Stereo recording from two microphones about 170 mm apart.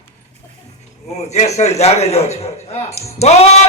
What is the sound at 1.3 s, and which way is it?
A man's voice, 40° left (ahead or behind).